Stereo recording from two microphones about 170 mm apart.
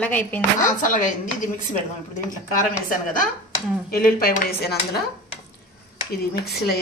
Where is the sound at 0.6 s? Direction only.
50° left (ahead or behind).